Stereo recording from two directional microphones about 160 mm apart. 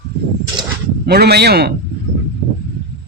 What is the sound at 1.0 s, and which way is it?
Speech, 90° right.